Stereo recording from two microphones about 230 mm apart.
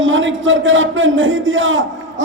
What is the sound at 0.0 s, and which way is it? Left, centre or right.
A man's voice, right.